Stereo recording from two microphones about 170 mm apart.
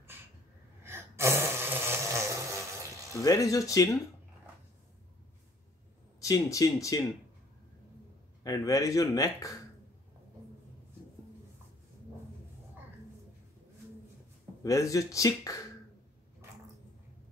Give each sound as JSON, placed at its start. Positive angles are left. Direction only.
{"t": 0.8, "sound": "a sound", "side_deg": -15}
{"t": 3.2, "sound": "speech", "side_deg": 20}
{"t": 6.2, "sound": "speech", "side_deg": 20}
{"t": 8.5, "sound": "speech", "side_deg": 20}
{"t": 14.6, "sound": "speech", "side_deg": 20}